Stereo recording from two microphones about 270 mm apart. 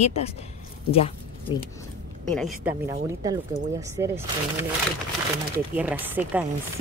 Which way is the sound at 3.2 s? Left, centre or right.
Centre.